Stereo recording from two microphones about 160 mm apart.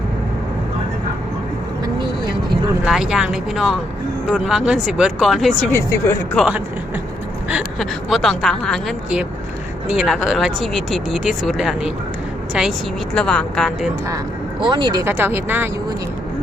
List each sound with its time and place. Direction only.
2.8 s speech: 5° right (ahead or behind)
5.7 s speech: 15° left (ahead or behind)
7.5 s speech: centre (ahead or behind)
13.1 s speech: 5° left (ahead or behind)
14.6 s speech: 30° right (ahead or behind)
15.0 s speech: 15° right (ahead or behind)